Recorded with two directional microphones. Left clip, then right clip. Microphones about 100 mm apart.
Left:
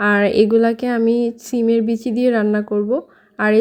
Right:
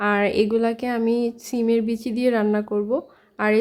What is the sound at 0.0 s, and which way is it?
Speech, 30° left (ahead or behind).